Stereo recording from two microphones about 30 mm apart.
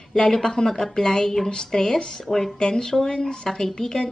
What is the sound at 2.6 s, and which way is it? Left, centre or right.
A woman's voice, left.